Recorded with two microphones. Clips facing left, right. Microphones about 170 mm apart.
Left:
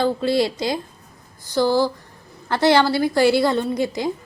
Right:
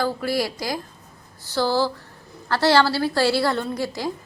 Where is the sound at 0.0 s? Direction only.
25° left (ahead or behind).